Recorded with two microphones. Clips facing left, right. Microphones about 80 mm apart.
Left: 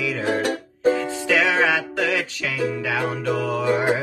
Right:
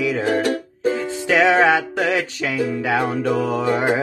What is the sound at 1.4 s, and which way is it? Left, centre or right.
Music, right.